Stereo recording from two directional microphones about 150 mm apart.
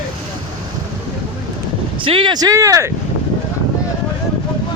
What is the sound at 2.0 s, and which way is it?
Speech, 35° right (ahead or behind).